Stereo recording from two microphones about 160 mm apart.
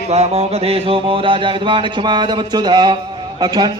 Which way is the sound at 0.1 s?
40° right (ahead or behind).